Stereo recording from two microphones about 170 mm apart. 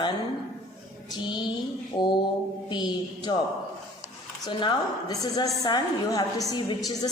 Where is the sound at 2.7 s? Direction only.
25° left (ahead or behind).